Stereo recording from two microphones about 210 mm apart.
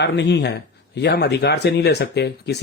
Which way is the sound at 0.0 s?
55° left (ahead or behind).